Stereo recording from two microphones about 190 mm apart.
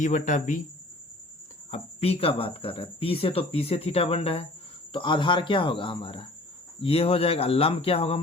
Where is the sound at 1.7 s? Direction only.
30° left (ahead or behind).